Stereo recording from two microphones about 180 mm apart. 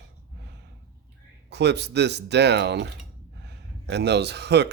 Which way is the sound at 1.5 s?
70° right (ahead or behind).